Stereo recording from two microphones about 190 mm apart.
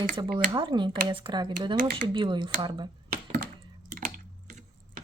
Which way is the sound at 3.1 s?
50° right (ahead or behind).